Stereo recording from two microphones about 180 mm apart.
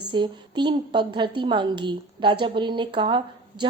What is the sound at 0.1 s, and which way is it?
A woman's voice, 25° right (ahead or behind).